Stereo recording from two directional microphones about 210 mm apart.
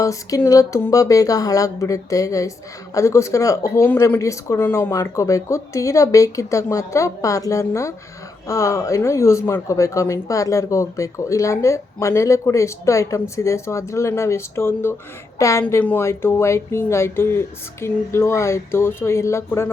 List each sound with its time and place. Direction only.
0.0 s speech: 15° left (ahead or behind)